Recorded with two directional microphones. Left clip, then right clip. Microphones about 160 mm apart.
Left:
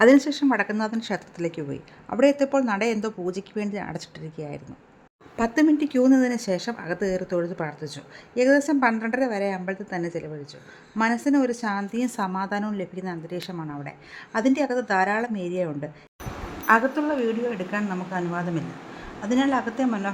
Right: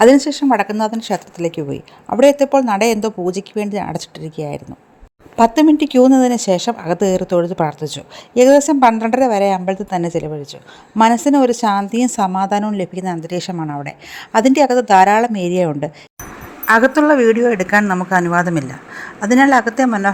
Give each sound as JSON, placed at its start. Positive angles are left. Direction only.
{"t": 0.0, "sound": "a woman's voice", "side_deg": -35}
{"t": 5.4, "sound": "speech", "side_deg": -40}